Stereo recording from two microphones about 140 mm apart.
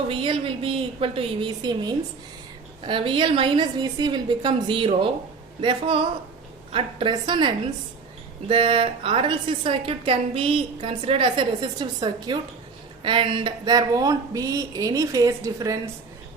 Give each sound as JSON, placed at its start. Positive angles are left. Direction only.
{"t": 0.1, "sound": "a woman's voice", "side_deg": -40}